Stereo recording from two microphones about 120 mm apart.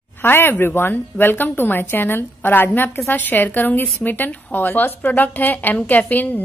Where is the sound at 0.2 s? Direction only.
20° left (ahead or behind).